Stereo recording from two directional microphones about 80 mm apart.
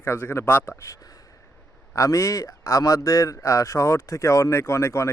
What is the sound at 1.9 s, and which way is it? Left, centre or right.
Speech, left.